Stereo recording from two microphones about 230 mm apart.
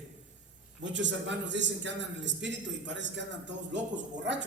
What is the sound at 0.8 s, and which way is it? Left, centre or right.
A man's voice, right.